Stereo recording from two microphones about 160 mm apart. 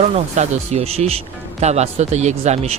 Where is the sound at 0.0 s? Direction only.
45° right (ahead or behind).